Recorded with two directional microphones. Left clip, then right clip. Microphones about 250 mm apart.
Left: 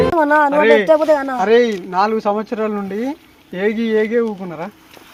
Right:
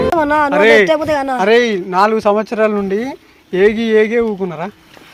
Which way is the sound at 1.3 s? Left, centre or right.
Right.